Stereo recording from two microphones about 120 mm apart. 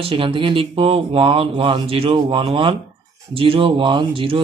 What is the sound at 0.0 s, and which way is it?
Speech, 45° right (ahead or behind).